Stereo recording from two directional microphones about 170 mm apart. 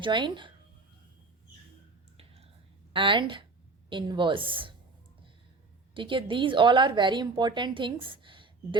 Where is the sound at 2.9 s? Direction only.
30° right (ahead or behind).